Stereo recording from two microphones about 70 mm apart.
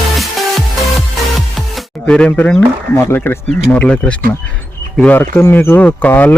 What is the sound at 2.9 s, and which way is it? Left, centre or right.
Speech, left.